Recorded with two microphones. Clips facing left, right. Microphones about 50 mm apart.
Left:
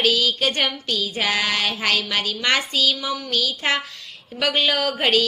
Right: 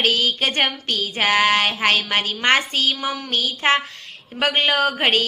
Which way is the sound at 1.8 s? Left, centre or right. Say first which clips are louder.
Right 3 dB; right.